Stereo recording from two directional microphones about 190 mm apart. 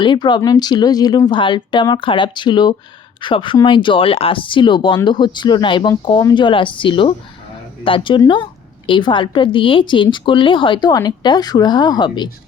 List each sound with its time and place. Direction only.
0.0 s a woman's voice: 25° left (ahead or behind)